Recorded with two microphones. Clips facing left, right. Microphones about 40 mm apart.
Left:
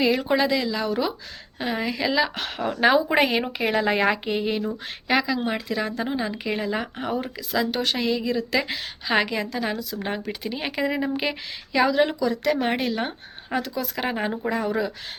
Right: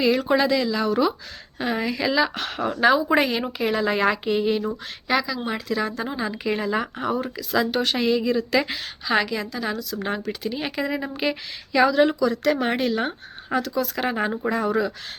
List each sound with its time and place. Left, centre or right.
0.0 s a woman's voice: centre
3.2 s a woman's voice: left
5.0 s a woman's voice: left
5.5 s a woman's voice: centre
7.5 s a woman's voice: centre
9.0 s a woman's voice: left